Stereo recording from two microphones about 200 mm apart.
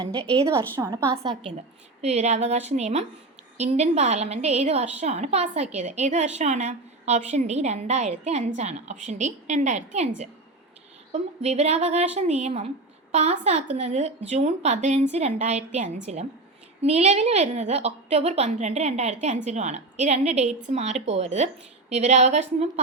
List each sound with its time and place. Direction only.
0.8 s a woman's voice: 15° right (ahead or behind)
1.2 s a woman's voice: 30° right (ahead or behind)